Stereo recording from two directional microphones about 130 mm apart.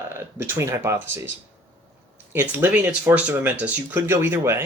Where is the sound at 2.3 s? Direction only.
15° right (ahead or behind).